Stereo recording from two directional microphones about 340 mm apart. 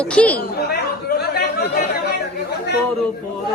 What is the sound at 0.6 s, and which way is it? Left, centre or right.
Chatter, left.